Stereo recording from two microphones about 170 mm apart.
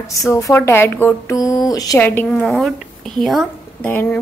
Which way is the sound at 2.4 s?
Centre (ahead or behind).